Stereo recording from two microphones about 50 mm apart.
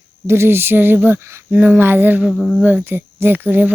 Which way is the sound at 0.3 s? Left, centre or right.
Right.